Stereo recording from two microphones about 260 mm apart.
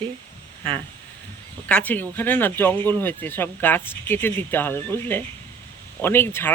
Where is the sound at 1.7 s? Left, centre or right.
Centre.